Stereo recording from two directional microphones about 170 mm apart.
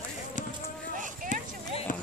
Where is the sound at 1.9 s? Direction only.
50° left (ahead or behind).